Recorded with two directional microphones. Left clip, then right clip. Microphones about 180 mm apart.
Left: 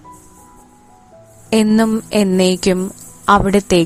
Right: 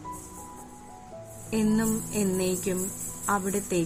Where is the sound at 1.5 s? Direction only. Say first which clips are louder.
Left 13 dB; 65° left (ahead or behind).